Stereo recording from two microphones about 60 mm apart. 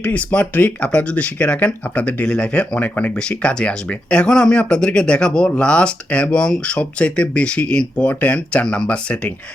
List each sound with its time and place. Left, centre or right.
0.0 s speech: left